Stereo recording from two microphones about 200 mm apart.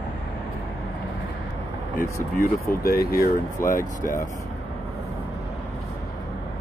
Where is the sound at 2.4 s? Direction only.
50° left (ahead or behind).